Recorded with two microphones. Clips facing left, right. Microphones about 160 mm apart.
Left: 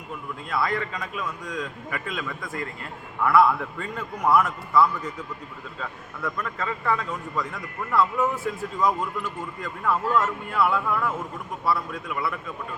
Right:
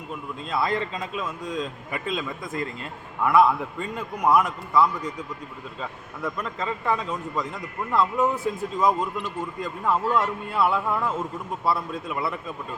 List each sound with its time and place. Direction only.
0.4 s a man's voice: 25° right (ahead or behind)